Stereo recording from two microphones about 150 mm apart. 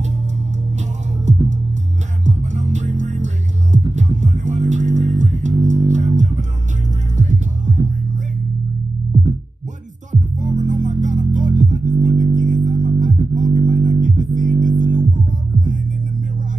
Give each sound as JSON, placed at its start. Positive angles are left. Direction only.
{"t": 0.7, "sound": "music", "side_deg": -50}
{"t": 10.6, "sound": "music", "side_deg": -55}